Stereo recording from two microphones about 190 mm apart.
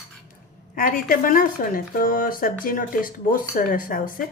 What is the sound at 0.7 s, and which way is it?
Speech, 50° left (ahead or behind).